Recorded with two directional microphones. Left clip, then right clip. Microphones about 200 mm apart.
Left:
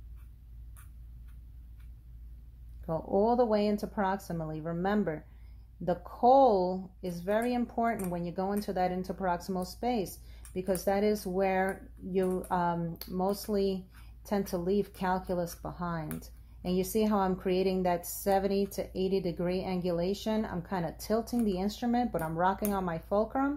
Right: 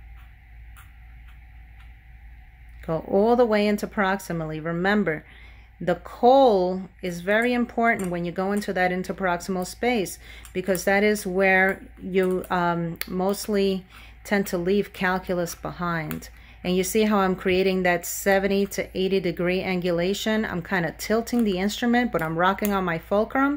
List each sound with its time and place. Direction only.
2.9 s speech: 25° right (ahead or behind)